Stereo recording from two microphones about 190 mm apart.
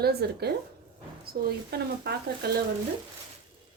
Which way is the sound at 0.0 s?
55° right (ahead or behind).